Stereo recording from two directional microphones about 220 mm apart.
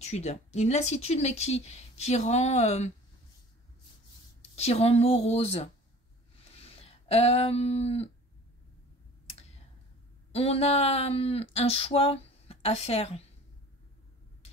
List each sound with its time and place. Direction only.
0.0 s speech: 30° left (ahead or behind)
4.6 s speech: 30° left (ahead or behind)
10.3 s speech: 25° left (ahead or behind)